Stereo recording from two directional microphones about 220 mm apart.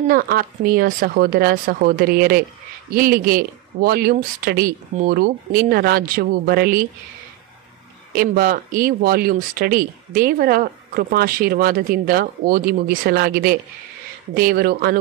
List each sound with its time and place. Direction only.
0.1 s speech: 40° right (ahead or behind)
8.1 s speech: 40° right (ahead or behind)